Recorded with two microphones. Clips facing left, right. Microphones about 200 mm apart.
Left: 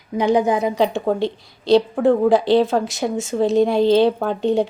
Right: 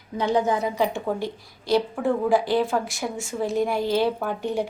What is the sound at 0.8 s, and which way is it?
Speech, 75° left (ahead or behind).